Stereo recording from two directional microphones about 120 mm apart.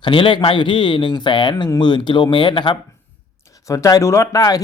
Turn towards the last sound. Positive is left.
turn(degrees=30)  # may be behind; listen again after turning